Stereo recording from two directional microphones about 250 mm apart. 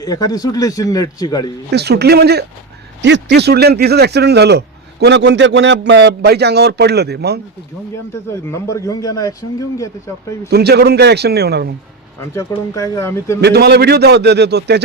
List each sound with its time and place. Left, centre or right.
0.0 s a man's voice: centre
1.7 s a man's voice: right
8.3 s a man's voice: centre
10.5 s a man's voice: right
12.3 s a man's voice: centre
13.4 s a man's voice: right